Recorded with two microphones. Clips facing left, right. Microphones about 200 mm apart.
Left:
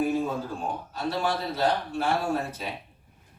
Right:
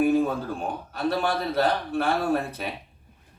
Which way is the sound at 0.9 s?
60° right (ahead or behind).